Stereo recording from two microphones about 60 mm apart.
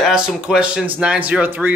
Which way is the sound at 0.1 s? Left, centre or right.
Centre.